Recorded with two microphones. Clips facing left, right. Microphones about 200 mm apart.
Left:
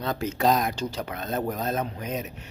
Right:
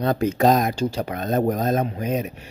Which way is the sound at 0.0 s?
55° right (ahead or behind).